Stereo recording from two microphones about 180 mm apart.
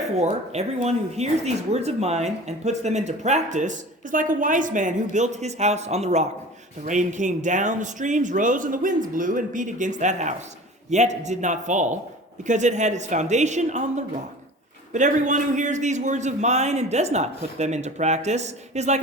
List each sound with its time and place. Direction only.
0.2 s speech: 40° right (ahead or behind)